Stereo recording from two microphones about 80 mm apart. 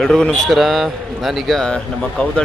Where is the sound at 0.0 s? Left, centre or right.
Centre.